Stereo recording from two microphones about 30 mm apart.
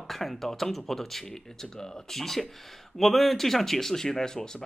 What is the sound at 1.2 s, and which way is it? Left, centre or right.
Speech, centre.